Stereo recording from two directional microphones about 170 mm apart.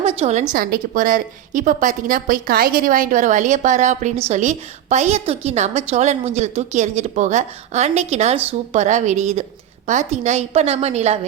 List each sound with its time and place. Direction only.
0.0 s a woman's voice: 35° right (ahead or behind)